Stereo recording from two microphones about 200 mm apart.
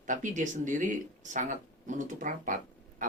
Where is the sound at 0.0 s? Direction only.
40° right (ahead or behind).